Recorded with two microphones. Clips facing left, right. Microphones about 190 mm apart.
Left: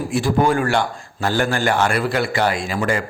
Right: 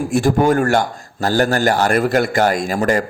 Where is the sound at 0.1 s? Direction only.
45° right (ahead or behind).